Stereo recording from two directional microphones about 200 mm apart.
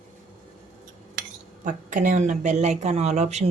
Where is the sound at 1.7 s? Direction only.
40° right (ahead or behind).